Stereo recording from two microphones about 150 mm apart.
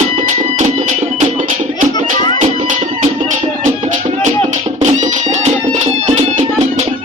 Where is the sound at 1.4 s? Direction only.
60° right (ahead or behind).